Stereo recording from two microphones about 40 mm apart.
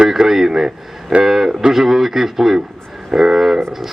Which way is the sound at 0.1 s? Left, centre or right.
Centre.